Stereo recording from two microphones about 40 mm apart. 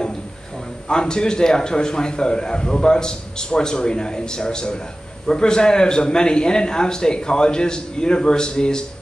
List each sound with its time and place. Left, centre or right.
0.8 s a man's voice: centre